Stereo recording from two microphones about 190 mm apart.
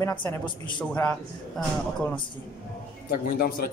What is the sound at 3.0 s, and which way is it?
Speech, 50° left (ahead or behind).